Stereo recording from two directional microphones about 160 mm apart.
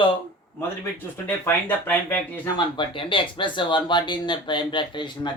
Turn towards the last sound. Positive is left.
turn(degrees=30)  # may be behind; listen again after turning